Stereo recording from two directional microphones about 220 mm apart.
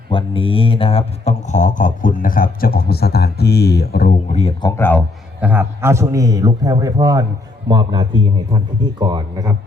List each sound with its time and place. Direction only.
0.1 s speech: 25° left (ahead or behind)
4.8 s a man's voice: 10° left (ahead or behind)
5.4 s a man's voice: 10° right (ahead or behind)